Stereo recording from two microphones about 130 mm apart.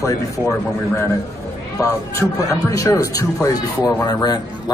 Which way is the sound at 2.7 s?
25° left (ahead or behind).